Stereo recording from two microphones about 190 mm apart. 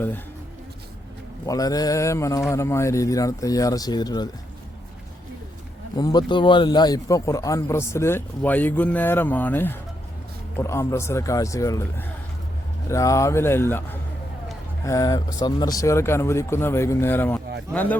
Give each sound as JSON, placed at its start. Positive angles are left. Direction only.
{"t": 1.5, "sound": "a man's voice", "side_deg": 20}
{"t": 6.0, "sound": "a man's voice", "side_deg": 20}